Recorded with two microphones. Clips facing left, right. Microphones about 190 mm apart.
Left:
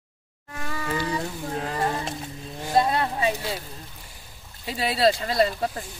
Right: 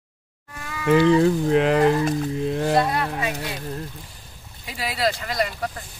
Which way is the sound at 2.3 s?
90° right.